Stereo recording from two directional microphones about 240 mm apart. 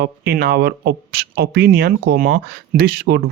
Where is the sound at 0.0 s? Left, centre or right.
Right.